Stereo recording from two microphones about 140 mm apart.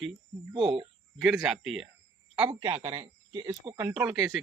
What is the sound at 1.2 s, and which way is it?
Speech, centre (ahead or behind).